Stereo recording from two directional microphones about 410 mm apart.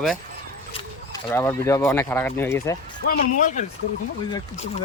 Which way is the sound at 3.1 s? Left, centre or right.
Centre.